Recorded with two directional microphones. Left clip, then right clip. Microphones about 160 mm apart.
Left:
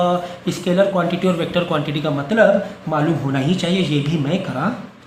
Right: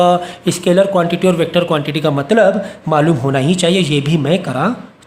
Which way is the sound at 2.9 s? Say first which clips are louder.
Right 7 dB; 60° right (ahead or behind).